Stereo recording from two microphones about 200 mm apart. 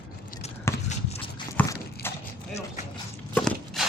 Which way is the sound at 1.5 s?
15° left (ahead or behind).